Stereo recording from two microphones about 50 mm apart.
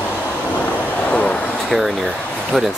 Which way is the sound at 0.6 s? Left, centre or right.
Left.